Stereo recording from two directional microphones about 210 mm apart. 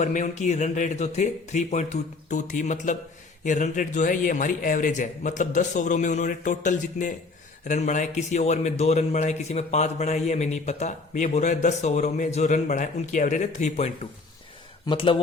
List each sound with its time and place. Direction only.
0.0 s a man's voice: 35° left (ahead or behind)